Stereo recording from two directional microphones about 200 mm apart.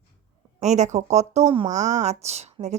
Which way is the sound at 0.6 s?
35° right (ahead or behind).